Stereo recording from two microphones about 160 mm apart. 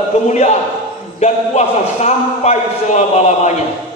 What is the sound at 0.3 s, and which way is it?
Speech, 45° left (ahead or behind).